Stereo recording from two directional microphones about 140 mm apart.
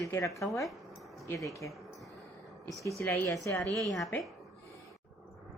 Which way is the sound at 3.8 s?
Centre (ahead or behind).